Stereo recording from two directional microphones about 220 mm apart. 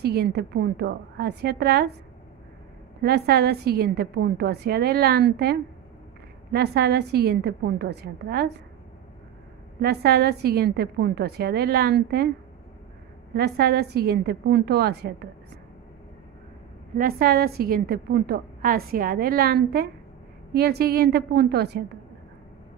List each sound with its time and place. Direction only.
0.0 s a woman's voice: 45° right (ahead or behind)
3.0 s a woman's voice: 45° right (ahead or behind)
9.8 s a woman's voice: 45° right (ahead or behind)
13.3 s a woman's voice: 45° right (ahead or behind)
16.9 s a woman's voice: 40° right (ahead or behind)